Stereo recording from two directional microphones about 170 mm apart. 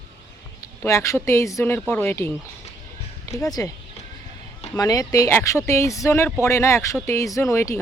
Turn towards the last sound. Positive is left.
turn(degrees=15)  # may be behind; listen again after turning